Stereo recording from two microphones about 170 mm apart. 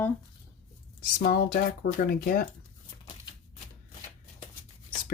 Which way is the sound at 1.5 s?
60° left (ahead or behind).